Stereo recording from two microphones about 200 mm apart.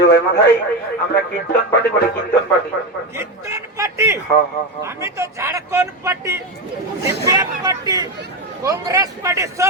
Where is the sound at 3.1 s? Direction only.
15° right (ahead or behind).